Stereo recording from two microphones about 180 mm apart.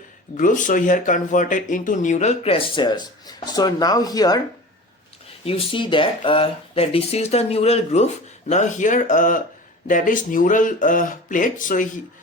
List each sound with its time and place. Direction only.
0.3 s speech: 45° left (ahead or behind); by 4.4 s 20° left (ahead or behind)
5.5 s speech: 30° left (ahead or behind); by 11.9 s 45° left (ahead or behind)